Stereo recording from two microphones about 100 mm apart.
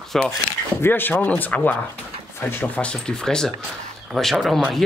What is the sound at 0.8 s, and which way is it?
Speech, 20° left (ahead or behind).